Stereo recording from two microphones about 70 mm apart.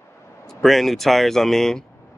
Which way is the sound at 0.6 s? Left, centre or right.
Centre.